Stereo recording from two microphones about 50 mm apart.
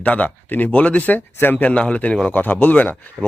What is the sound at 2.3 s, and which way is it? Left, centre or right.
Speech, left.